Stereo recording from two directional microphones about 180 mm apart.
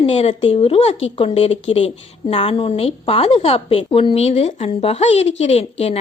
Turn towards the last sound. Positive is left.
turn(degrees=35)  # may be behind; listen again after turning